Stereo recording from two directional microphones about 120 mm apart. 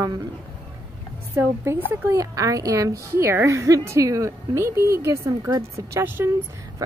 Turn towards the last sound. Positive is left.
turn(degrees=-20)  # may be behind; listen again after turning